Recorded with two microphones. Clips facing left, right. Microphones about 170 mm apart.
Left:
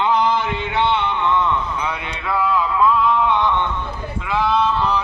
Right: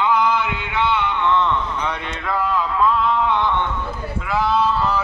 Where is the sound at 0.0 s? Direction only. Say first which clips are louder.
Left 1 dB; 30° left (ahead or behind).